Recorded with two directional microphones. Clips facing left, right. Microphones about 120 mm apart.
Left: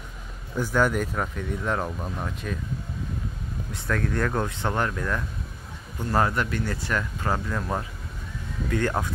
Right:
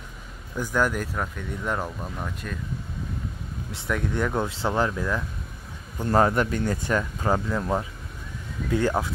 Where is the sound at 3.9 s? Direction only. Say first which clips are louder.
Even; 15° right (ahead or behind).